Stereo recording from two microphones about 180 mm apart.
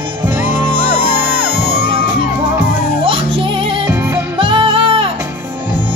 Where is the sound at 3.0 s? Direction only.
30° right (ahead or behind).